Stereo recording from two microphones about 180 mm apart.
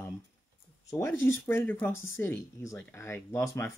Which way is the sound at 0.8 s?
15° left (ahead or behind).